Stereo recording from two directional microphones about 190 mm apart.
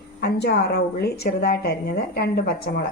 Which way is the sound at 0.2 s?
55° left (ahead or behind).